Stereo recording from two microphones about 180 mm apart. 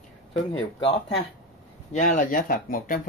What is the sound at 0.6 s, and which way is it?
Speech, 30° left (ahead or behind).